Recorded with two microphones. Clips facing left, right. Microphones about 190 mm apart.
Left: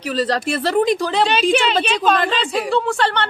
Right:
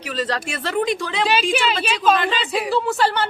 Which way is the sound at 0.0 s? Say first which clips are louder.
Left 5 dB; 35° left (ahead or behind).